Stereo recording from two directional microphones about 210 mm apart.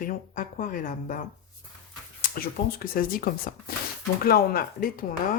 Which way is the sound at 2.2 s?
45° left (ahead or behind).